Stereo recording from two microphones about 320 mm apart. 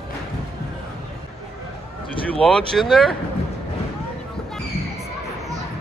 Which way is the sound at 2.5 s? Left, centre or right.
Centre.